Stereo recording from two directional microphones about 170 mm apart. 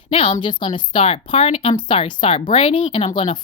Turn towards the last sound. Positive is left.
turn(degrees=30)  # may be behind; listen again after turning